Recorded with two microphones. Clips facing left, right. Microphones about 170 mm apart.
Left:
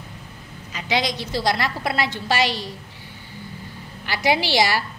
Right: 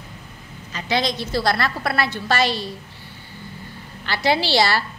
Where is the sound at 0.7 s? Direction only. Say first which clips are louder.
Right 1 dB; 15° left (ahead or behind).